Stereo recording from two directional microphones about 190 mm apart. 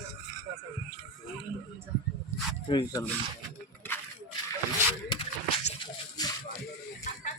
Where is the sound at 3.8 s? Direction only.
10° left (ahead or behind).